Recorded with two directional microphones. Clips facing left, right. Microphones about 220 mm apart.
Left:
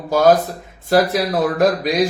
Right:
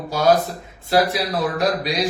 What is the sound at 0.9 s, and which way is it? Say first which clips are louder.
Speech: left 3 dB; 50° left (ahead or behind).